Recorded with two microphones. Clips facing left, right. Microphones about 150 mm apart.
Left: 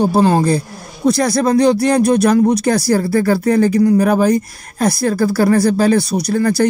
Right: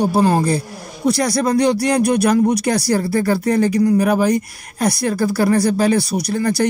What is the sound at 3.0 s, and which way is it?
Speech, 30° right (ahead or behind).